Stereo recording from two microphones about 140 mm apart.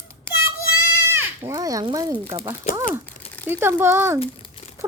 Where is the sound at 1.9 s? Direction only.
25° right (ahead or behind).